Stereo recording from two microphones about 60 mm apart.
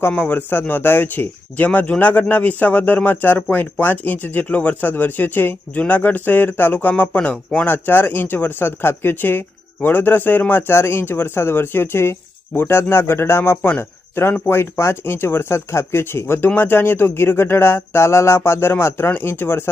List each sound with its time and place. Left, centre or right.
0.2 s a man's voice: left
13.6 s a man's voice: left
14.4 s speech: left